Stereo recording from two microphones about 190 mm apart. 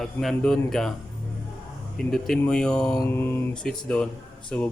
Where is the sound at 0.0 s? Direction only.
Centre (ahead or behind).